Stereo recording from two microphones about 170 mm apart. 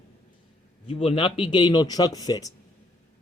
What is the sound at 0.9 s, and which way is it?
Speech, 35° left (ahead or behind).